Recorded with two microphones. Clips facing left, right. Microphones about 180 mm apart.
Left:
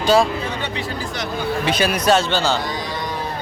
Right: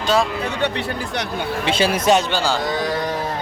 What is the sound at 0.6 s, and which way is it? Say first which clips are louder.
Speech: right 3 dB; 65° right (ahead or behind).